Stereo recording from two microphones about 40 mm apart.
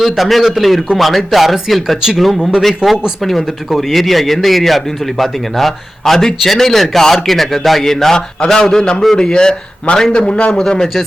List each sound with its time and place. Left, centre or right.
0.0 s a man's voice: centre; by 10.6 s left